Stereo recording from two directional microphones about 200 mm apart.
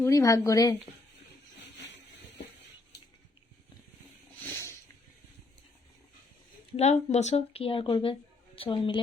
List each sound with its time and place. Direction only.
0.0 s a woman's voice: 15° left (ahead or behind)
4.5 s a sound: 15° left (ahead or behind)
6.7 s a woman's voice: 35° left (ahead or behind)